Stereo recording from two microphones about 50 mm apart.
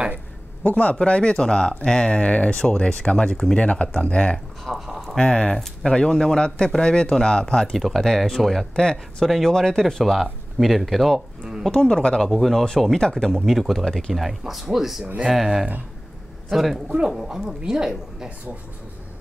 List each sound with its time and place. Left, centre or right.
0.7 s speech: left
4.6 s a sound: centre
5.2 s speech: centre
9.2 s speech: centre
9.5 s speech: centre
11.7 s speech: left
12.2 s speech: centre
14.1 s a woman's voice: centre